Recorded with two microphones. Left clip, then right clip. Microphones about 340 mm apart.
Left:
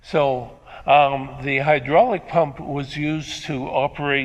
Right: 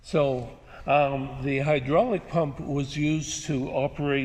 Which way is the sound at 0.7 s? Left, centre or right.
Left.